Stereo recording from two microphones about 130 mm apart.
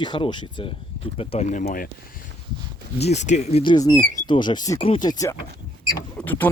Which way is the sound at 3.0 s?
60° left (ahead or behind).